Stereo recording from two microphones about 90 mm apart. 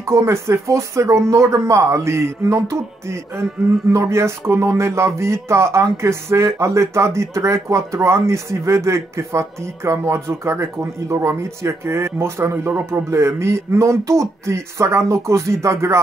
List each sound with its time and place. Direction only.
0.0 s speech: 30° right (ahead or behind)